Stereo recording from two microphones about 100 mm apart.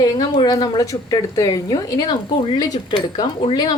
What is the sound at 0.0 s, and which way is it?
A woman's voice, 40° left (ahead or behind).